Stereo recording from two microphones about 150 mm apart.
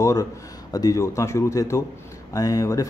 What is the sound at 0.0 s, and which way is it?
Speech, 20° left (ahead or behind).